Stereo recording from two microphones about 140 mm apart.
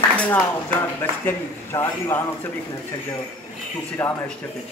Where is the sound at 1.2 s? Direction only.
15° left (ahead or behind).